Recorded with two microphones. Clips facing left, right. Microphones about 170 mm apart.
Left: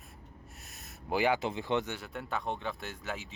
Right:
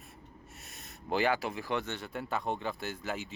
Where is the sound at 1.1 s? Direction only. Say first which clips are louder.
Left 1 dB; 15° left (ahead or behind).